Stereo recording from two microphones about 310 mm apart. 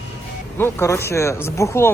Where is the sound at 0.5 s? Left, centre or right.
Centre.